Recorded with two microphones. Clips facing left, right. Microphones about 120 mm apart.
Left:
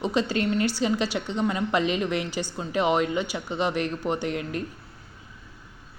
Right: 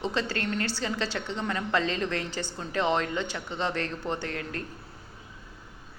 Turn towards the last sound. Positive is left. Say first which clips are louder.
# left 5 dB
turn(degrees=15)  # may be behind; listen again after turning